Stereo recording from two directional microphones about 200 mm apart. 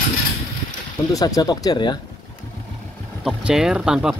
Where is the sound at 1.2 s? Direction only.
20° left (ahead or behind).